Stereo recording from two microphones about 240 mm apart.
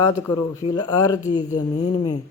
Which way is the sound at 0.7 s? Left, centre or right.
Centre.